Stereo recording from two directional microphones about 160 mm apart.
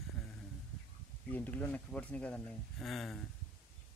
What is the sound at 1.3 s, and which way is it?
Speech, 10° left (ahead or behind).